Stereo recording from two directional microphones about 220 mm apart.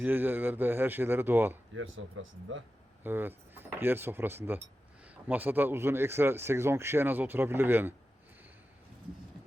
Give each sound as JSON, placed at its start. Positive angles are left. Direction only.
{"t": 0.0, "sound": "speech", "side_deg": -10}
{"t": 1.7, "sound": "speech", "side_deg": -65}
{"t": 3.0, "sound": "speech", "side_deg": -10}